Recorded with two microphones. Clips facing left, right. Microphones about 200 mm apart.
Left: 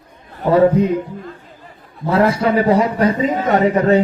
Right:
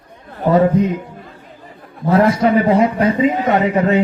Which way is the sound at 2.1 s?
30° left (ahead or behind).